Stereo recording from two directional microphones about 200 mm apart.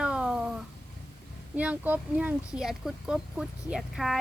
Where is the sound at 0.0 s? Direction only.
5° right (ahead or behind).